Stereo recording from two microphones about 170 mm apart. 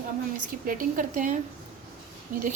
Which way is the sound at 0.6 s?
55° right (ahead or behind).